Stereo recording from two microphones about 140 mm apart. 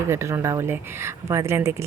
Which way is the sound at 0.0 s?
20° right (ahead or behind).